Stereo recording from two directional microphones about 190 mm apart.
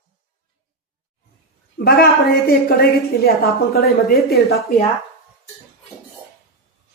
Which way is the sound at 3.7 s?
55° left (ahead or behind).